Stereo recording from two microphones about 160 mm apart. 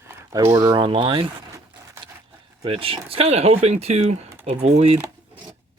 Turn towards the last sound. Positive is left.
turn(degrees=-40)  # may be behind; listen again after turning